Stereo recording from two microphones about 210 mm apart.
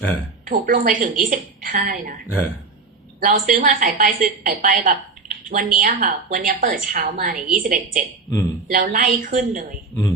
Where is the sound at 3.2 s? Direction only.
40° right (ahead or behind).